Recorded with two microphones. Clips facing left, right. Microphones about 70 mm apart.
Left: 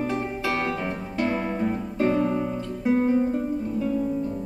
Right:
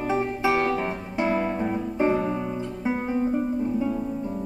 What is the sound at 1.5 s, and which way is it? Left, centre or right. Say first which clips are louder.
Guitar: even; centre.